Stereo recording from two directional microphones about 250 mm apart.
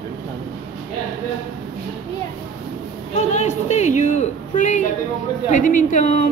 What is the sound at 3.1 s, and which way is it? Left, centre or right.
A man's voice, left.